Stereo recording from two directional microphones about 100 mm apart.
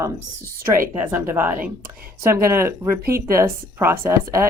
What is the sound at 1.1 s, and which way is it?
Speech, 20° right (ahead or behind).